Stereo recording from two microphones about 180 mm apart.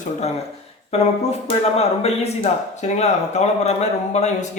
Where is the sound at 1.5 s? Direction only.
35° left (ahead or behind).